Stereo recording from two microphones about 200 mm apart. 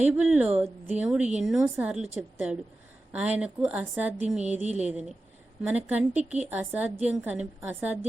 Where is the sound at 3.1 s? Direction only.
5° right (ahead or behind).